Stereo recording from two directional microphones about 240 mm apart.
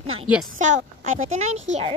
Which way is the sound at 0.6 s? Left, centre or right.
Right.